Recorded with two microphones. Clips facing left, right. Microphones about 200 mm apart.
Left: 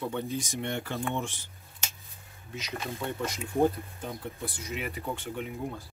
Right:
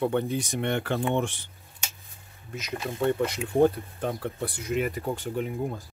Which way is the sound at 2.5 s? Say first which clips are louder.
Right 5 dB; 55° right (ahead or behind).